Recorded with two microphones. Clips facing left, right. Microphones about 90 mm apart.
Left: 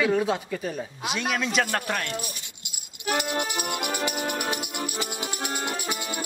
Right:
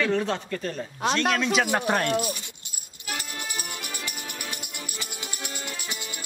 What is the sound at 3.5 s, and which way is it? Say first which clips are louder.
Music: left 8 dB; 55° left (ahead or behind).